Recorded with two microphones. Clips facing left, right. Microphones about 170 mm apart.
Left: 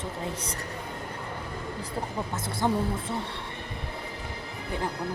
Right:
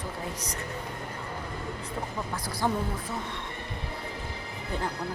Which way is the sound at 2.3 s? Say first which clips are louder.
Left 2 dB; 25° left (ahead or behind).